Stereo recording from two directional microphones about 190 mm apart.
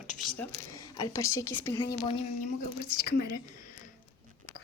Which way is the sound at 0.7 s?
15° left (ahead or behind).